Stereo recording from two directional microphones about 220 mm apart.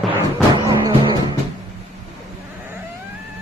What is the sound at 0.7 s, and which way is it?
Music, 20° right (ahead or behind).